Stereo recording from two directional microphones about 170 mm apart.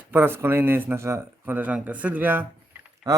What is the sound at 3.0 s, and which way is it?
Speech, 25° right (ahead or behind).